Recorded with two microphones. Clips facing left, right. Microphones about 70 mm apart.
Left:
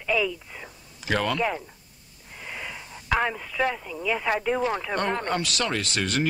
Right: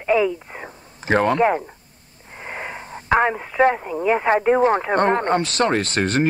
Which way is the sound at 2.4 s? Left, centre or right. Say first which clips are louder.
Right 6 dB; right.